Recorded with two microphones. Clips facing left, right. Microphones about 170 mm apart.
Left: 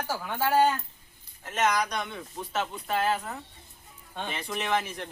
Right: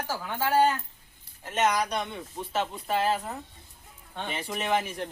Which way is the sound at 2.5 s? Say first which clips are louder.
Right 1 dB; 30° right (ahead or behind).